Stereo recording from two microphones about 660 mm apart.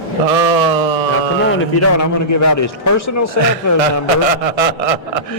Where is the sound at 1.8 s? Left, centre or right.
Left.